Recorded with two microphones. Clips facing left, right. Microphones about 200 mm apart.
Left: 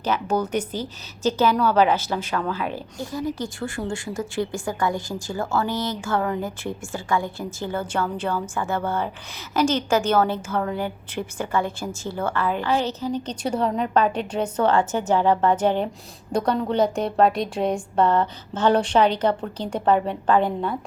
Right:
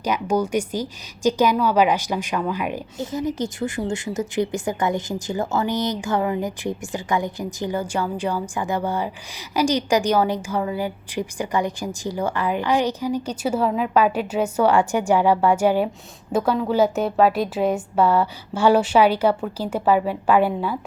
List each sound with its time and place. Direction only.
0.0 s a woman's voice: 10° right (ahead or behind)